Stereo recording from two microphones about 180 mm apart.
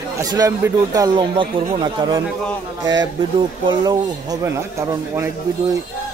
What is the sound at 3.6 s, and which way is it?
Speech, 20° right (ahead or behind).